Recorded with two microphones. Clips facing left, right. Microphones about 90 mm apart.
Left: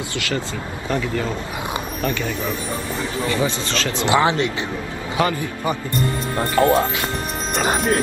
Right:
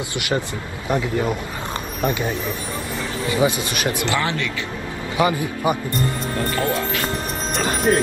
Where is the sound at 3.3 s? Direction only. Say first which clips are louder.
Right 4 dB; 15° right (ahead or behind).